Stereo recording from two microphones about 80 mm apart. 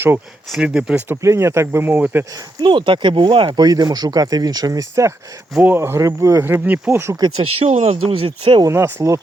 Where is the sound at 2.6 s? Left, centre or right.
Right.